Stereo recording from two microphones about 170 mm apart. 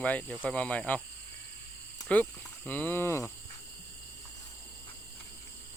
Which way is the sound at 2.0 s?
10° left (ahead or behind).